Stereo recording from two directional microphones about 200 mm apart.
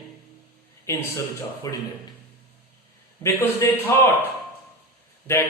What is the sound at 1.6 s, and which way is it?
Speech, 15° left (ahead or behind).